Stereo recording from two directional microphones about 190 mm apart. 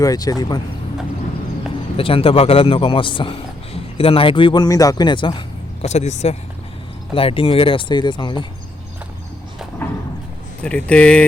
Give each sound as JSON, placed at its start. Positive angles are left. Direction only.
{"t": 0.0, "sound": "a man's voice", "side_deg": 20}
{"t": 2.0, "sound": "a man's voice", "side_deg": 30}
{"t": 5.8, "sound": "a man's voice", "side_deg": 35}
{"t": 10.6, "sound": "speech", "side_deg": 5}